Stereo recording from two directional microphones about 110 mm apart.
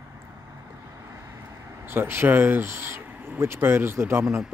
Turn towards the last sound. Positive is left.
turn(degrees=-20)  # may be behind; listen again after turning